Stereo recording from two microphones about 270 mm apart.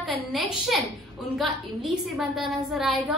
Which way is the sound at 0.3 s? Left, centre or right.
Centre.